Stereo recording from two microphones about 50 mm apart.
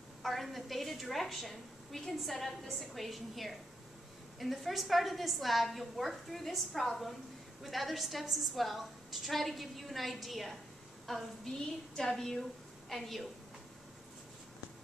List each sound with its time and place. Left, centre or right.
0.2 s a woman's voice: centre